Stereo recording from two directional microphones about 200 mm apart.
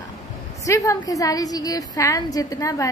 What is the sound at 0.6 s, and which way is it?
A woman's voice, 15° left (ahead or behind).